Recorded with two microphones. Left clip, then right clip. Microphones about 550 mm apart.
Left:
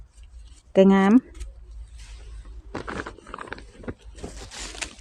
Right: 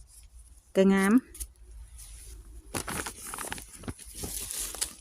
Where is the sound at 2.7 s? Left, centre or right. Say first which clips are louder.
Left 3 dB; right.